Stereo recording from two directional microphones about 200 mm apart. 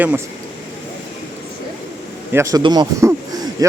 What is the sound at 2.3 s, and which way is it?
Speech, 15° right (ahead or behind).